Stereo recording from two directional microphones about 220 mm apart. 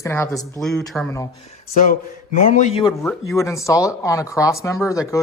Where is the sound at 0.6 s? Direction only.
Centre (ahead or behind).